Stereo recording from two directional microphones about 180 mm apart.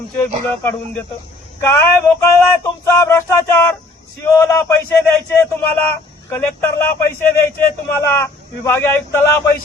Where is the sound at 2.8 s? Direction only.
15° left (ahead or behind).